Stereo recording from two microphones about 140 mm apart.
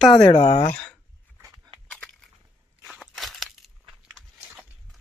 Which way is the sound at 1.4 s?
25° right (ahead or behind).